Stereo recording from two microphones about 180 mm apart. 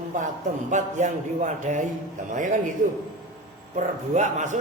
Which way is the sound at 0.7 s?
40° right (ahead or behind).